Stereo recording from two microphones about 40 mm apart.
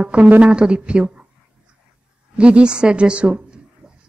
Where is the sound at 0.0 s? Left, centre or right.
Right.